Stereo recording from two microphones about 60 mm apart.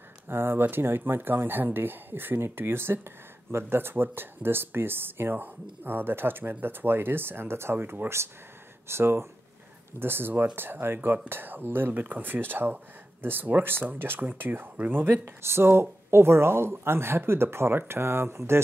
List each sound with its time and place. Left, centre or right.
0.3 s speech: right
15.0 s speech: right